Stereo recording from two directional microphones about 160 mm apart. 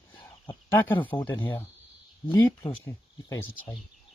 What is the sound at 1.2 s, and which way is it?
Speech, 15° left (ahead or behind).